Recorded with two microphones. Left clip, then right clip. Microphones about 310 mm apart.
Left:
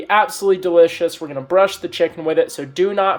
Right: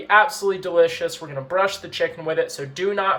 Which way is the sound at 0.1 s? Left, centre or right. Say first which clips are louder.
Left 2 dB; left.